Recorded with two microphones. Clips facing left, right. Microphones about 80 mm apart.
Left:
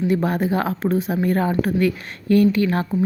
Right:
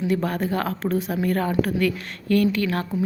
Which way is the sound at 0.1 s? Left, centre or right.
Centre.